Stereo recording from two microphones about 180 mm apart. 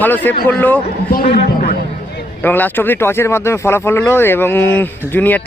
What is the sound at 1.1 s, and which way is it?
A man's voice, 60° left (ahead or behind).